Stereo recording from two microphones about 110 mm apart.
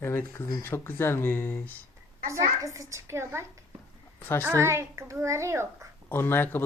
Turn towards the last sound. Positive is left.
turn(degrees=20)  # may be behind; listen again after turning